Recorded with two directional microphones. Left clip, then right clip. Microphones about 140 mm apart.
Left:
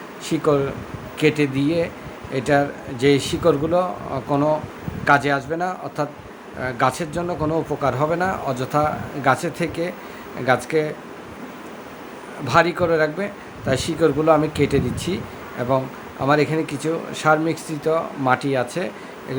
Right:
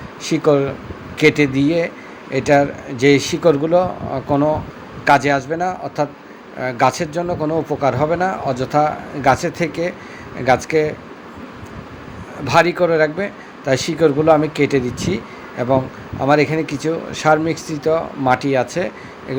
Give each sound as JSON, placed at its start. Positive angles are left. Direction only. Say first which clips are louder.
{"t": 0.3, "sound": "speech", "louder": "right 4 dB", "side_deg": -15}
{"t": 12.5, "sound": "speech", "louder": "right 3 dB", "side_deg": -10}